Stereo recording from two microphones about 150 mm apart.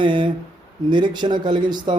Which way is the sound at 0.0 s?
30° right (ahead or behind).